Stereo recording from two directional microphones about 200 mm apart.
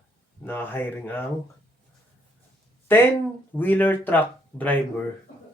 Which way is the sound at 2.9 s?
10° left (ahead or behind).